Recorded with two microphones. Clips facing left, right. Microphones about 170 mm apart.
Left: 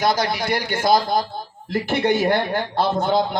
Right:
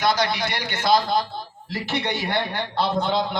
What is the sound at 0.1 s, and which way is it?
A man's voice, 45° left (ahead or behind).